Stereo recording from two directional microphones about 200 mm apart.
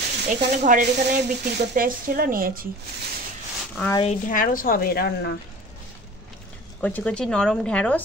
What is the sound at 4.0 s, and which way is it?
A woman's voice, 40° left (ahead or behind).